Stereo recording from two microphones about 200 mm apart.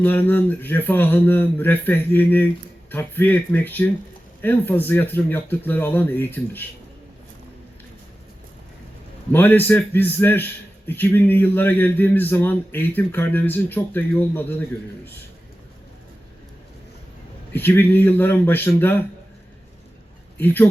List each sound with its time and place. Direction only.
0.0 s a man's voice: 10° left (ahead or behind)
9.3 s a man's voice: 10° left (ahead or behind)
17.5 s a man's voice: 10° left (ahead or behind)
20.4 s a man's voice: 10° left (ahead or behind)